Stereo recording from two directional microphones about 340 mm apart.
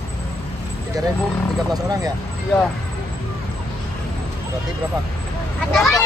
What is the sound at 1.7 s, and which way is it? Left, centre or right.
Speech, centre.